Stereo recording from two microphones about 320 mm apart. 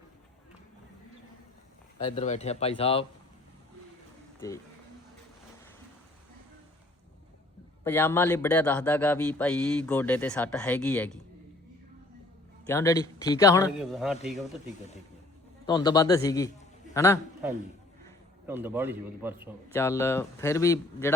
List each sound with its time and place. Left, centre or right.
2.0 s speech: centre
4.4 s speech: centre
7.9 s speech: centre
12.6 s speech: centre
13.7 s speech: centre
15.6 s a man's voice: centre
18.4 s a man's voice: centre
19.7 s speech: centre